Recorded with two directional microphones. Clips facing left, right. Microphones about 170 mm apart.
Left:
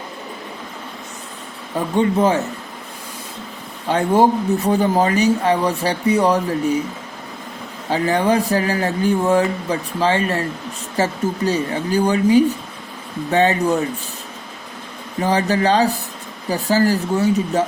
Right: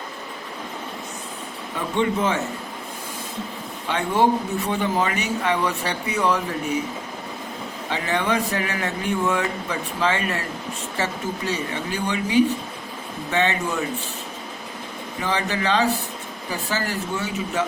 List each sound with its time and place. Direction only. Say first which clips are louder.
2.0 s speech: left 6 dB; 35° left (ahead or behind)
3.8 s speech: left 5 dB; 40° left (ahead or behind)
7.9 s speech: left 7 dB; 40° left (ahead or behind)
15.2 s speech: left 7 dB; 40° left (ahead or behind)